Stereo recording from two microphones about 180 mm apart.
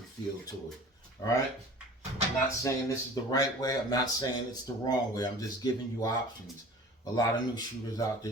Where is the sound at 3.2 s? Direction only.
20° left (ahead or behind).